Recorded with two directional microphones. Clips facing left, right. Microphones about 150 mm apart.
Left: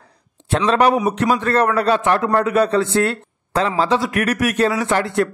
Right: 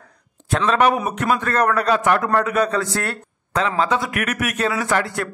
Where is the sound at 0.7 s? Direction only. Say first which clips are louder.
Left 3 dB; 35° left (ahead or behind).